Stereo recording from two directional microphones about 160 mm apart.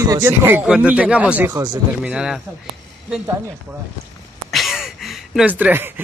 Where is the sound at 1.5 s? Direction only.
25° right (ahead or behind).